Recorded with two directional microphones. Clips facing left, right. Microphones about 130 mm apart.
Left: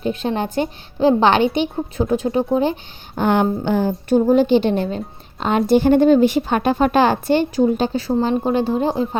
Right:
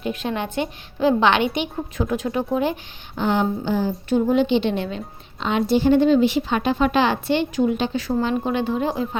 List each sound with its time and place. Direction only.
0.0 s a woman's voice: 35° left (ahead or behind)
3.2 s a woman's voice: 55° left (ahead or behind)
4.3 s a woman's voice: 45° left (ahead or behind)